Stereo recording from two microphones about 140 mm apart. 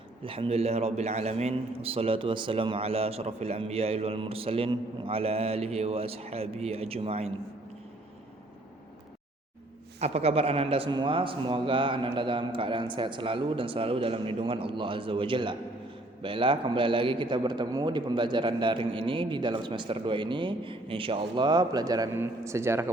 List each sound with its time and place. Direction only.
0.2 s a man's voice: 40° right (ahead or behind)
10.0 s a man's voice: 50° right (ahead or behind); by 22.9 s 20° right (ahead or behind)